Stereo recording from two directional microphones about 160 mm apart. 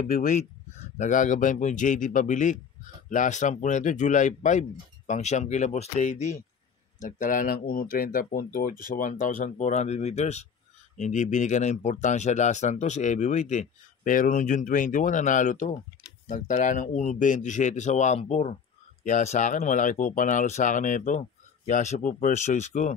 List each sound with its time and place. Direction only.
0.0 s a man's voice: 55° left (ahead or behind)